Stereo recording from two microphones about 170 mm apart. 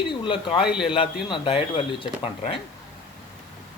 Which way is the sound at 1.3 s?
30° left (ahead or behind).